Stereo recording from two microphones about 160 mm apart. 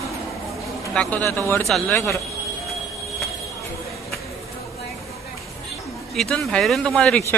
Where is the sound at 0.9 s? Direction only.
5° left (ahead or behind).